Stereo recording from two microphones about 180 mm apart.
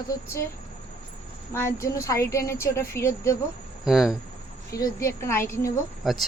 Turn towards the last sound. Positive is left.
turn(degrees=0)  # may be behind; listen again after turning